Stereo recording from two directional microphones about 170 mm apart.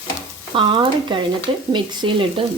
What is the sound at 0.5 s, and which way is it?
Speech, 30° right (ahead or behind).